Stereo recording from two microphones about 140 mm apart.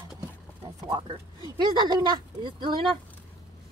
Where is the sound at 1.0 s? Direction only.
35° right (ahead or behind).